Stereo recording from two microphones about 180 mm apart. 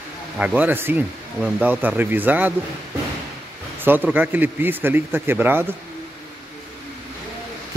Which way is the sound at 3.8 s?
10° right (ahead or behind).